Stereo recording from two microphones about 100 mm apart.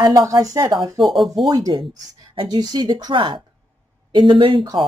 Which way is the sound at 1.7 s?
50° right (ahead or behind).